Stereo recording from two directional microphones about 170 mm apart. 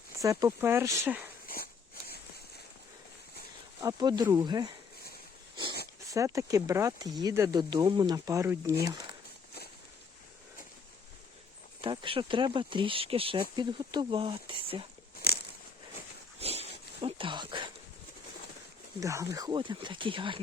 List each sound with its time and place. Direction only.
0.2 s speech: 20° right (ahead or behind)
1.5 s dog: 60° left (ahead or behind)
3.8 s speech: 20° right (ahead or behind)
6.1 s speech: 20° right (ahead or behind)
11.8 s speech: 30° right (ahead or behind)
16.4 s a sound: 35° right (ahead or behind)
18.9 s speech: 20° right (ahead or behind)